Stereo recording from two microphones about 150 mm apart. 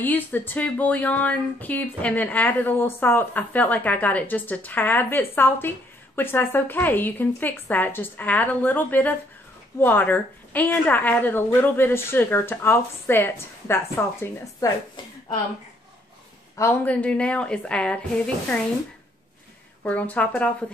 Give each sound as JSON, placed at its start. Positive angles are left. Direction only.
{"t": 0.0, "sound": "speech", "side_deg": 15}
{"t": 16.8, "sound": "speech", "side_deg": 10}
{"t": 19.8, "sound": "speech", "side_deg": 10}